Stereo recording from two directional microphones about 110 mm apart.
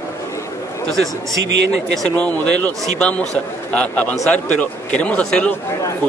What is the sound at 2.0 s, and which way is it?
Speech, 10° left (ahead or behind).